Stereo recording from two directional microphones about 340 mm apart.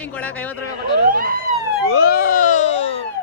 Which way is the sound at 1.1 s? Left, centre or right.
Right.